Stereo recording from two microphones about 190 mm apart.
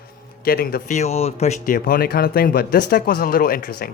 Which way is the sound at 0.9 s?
35° left (ahead or behind).